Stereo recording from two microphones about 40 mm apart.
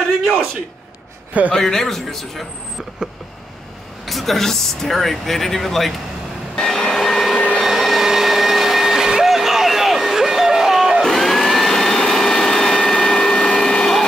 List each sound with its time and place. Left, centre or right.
1.5 s a man's voice: centre
3.0 s vehicle: centre
4.0 s speech: centre
6.5 s a sound: centre
7.6 s vacuum cleaner: centre
11.1 s vacuum cleaner: centre